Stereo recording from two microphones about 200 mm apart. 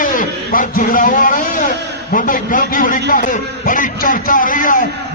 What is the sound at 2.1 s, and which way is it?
A man's voice, 45° left (ahead or behind).